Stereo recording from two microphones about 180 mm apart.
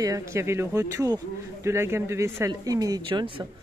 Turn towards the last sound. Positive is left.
turn(degrees=-25)  # may be behind; listen again after turning